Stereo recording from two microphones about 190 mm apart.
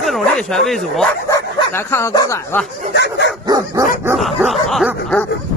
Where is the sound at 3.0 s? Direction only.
65° left (ahead or behind).